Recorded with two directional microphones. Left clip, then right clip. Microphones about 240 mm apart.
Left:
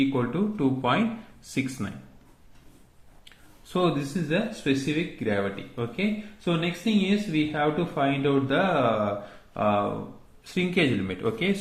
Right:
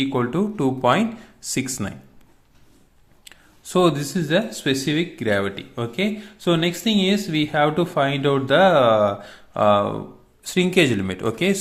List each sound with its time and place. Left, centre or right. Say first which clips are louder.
0.0 s speech: right 4 dB; right
3.2 s speech: right 8 dB; right